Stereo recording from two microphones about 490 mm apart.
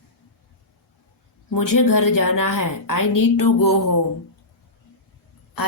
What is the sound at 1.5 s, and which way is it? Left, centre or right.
A woman's voice, left.